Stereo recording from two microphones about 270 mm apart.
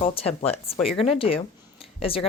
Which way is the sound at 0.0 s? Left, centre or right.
Left.